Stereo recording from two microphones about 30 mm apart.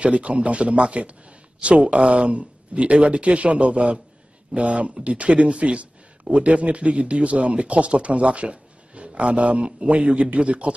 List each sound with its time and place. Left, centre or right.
0.0 s speech: right